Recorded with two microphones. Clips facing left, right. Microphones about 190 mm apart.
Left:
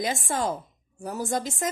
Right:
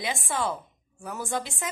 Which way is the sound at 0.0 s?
45° left (ahead or behind).